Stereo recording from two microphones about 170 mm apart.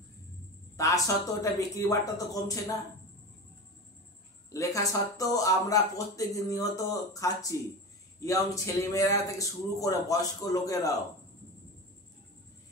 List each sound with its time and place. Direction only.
0.7 s speech: 20° left (ahead or behind)
4.5 s speech: 20° left (ahead or behind)